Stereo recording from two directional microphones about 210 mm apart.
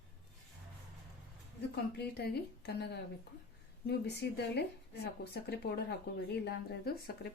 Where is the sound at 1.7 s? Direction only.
50° left (ahead or behind).